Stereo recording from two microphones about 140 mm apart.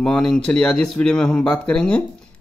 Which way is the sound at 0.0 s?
5° left (ahead or behind).